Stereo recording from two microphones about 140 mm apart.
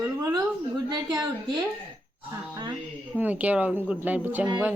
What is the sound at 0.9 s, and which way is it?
Speech, 30° right (ahead or behind).